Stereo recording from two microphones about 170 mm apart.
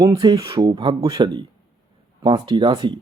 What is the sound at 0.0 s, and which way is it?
Speech, 25° right (ahead or behind).